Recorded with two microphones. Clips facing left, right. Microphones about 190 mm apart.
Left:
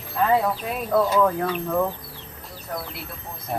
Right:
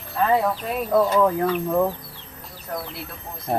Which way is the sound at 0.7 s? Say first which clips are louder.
Right 2 dB; 5° right (ahead or behind).